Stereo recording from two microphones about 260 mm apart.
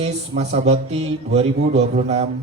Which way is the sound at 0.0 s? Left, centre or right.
Right.